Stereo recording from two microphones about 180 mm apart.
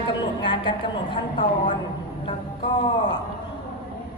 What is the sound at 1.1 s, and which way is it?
Speech, 25° left (ahead or behind).